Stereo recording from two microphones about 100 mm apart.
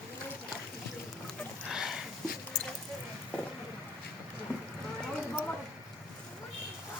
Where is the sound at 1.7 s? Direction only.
5° right (ahead or behind).